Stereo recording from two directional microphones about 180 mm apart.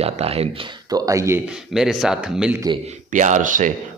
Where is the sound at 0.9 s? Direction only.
20° right (ahead or behind).